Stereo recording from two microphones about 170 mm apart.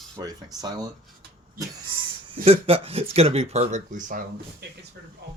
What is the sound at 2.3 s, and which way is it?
Speech, 35° right (ahead or behind).